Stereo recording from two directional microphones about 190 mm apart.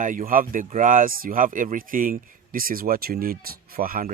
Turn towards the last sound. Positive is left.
turn(degrees=-50)  # may be behind; listen again after turning